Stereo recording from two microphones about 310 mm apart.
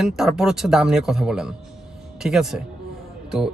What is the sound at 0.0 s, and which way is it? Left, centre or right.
A man's voice, centre.